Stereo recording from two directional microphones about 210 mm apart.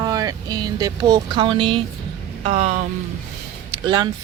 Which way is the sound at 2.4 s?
35° right (ahead or behind).